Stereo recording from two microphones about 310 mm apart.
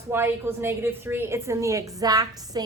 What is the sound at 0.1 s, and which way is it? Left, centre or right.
A woman's voice, centre.